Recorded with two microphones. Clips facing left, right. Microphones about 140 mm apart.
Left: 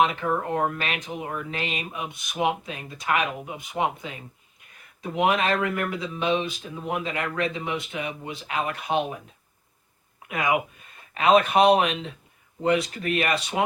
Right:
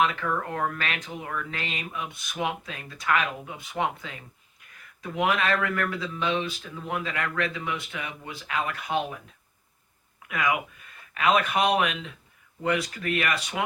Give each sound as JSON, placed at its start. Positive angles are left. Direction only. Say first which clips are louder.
{"t": 0.0, "sound": "speech", "louder": "left 3 dB", "side_deg": 20}
{"t": 10.2, "sound": "speech", "louder": "left 3 dB", "side_deg": 25}